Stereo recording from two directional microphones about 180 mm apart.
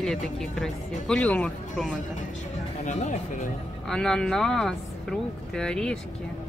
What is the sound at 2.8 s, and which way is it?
Speech, 40° left (ahead or behind).